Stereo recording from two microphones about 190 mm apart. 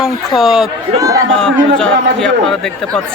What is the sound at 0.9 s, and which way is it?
Speech, 20° right (ahead or behind).